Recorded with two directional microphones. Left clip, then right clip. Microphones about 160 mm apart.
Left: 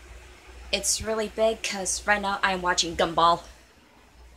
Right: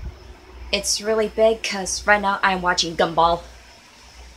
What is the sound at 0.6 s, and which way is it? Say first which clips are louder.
A woman's voice: right 5 dB; 20° right (ahead or behind).